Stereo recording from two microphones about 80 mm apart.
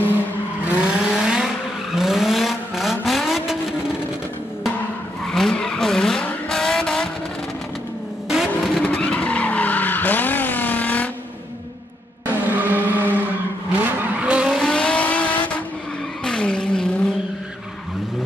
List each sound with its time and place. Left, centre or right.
0.7 s vehicle: centre
5.2 s vehicle: centre
8.5 s vehicle: centre
8.8 s vehicle: centre
12.5 s vehicle: right
14.6 s vehicle: centre